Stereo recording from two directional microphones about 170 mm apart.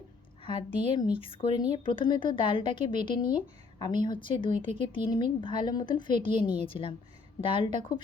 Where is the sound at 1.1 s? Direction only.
30° left (ahead or behind).